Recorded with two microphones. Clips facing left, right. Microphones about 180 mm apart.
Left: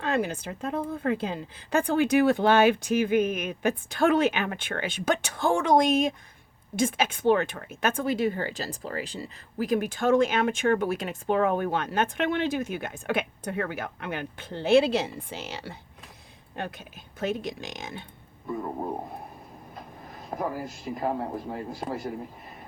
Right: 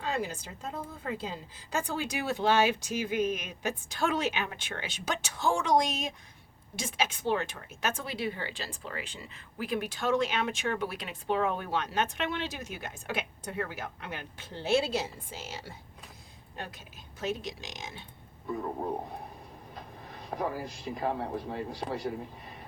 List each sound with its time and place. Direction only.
0.0 s speech: 60° left (ahead or behind)
16.6 s speech: 55° left (ahead or behind)
18.6 s speech: 15° left (ahead or behind)
19.7 s a sound: 5° left (ahead or behind)
20.6 s a man's voice: 5° left (ahead or behind)